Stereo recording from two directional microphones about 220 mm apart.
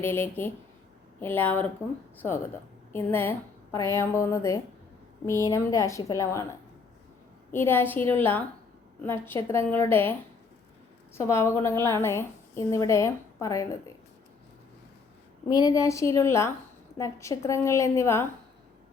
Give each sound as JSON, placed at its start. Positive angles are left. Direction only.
{"t": 0.0, "sound": "a woman's voice", "side_deg": 10}
{"t": 2.9, "sound": "a woman's voice", "side_deg": 10}
{"t": 7.5, "sound": "a woman's voice", "side_deg": 10}
{"t": 15.4, "sound": "a woman's voice", "side_deg": 15}